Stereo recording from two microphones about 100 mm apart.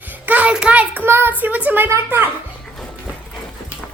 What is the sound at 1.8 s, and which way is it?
Child singing, 25° right (ahead or behind).